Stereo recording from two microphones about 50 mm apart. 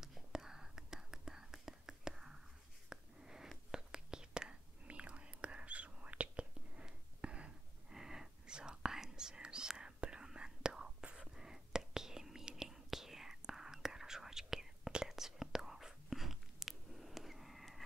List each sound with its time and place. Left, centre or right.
0.0 s whispering: centre
2.9 s a sound: centre
3.7 s whispering: centre
7.9 s whispering: centre